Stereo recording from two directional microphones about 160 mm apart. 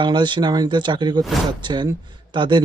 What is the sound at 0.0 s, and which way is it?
Speech, 30° right (ahead or behind).